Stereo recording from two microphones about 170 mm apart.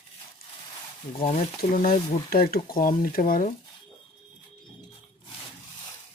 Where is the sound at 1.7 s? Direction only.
55° left (ahead or behind).